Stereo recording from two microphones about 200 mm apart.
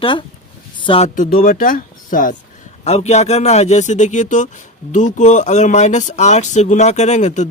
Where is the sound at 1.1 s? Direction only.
40° left (ahead or behind).